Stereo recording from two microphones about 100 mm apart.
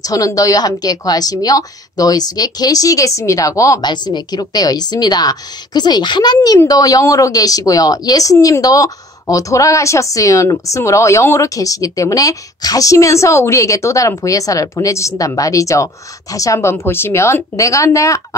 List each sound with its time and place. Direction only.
0.0 s speech: 35° left (ahead or behind)
3.8 s a woman's voice: 50° left (ahead or behind); by 18.2 s 30° left (ahead or behind)